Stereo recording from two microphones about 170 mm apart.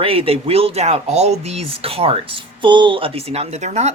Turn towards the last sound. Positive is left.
turn(degrees=-40)  # may be behind; listen again after turning